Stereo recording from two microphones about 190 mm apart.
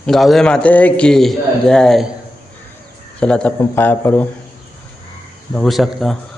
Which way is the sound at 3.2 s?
5° left (ahead or behind).